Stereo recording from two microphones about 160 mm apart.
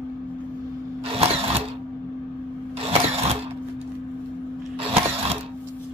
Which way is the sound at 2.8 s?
40° right (ahead or behind).